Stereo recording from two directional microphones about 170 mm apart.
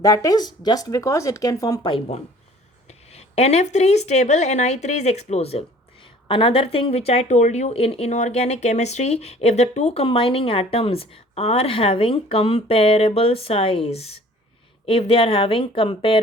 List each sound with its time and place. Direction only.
0.0 s speech: 20° left (ahead or behind)